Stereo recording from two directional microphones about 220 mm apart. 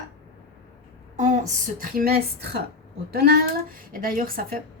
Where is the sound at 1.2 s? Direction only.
35° right (ahead or behind).